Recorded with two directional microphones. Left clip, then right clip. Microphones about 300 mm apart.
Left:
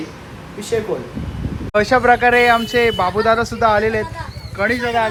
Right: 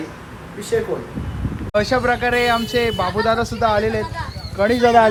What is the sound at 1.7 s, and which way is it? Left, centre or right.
Speech, centre.